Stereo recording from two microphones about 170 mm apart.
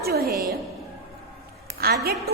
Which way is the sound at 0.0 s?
65° right (ahead or behind).